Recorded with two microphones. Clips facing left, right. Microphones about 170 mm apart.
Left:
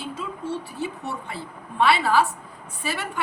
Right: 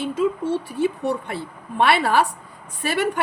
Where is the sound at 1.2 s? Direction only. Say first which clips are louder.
Right 5 dB; 65° right (ahead or behind).